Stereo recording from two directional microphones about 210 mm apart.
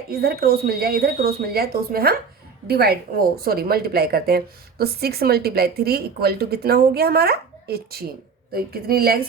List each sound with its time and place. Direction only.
0.1 s a woman's voice: 50° right (ahead or behind)